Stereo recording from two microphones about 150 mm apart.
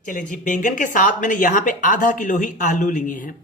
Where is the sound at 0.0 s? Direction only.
60° left (ahead or behind).